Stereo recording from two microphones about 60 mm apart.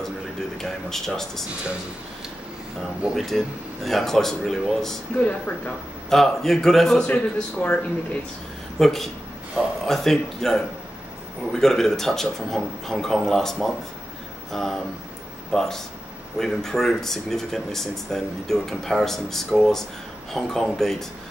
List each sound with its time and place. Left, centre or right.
0.0 s speech: centre
3.2 s speech: centre
5.1 s speech: left
5.7 s speech: centre
7.1 s speech: left
8.7 s speech: centre